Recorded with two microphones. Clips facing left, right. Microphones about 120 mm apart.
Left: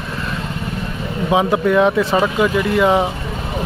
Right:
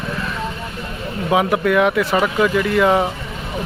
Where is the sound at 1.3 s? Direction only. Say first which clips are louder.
Left 1 dB; 25° left (ahead or behind).